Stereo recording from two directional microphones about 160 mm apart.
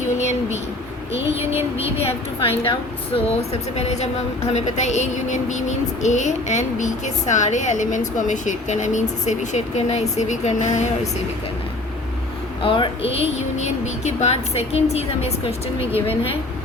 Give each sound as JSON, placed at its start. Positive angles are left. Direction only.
{"t": 0.0, "sound": "a sound", "side_deg": 45}
{"t": 1.8, "sound": "a woman's voice", "side_deg": 40}
{"t": 12.6, "sound": "speech", "side_deg": 35}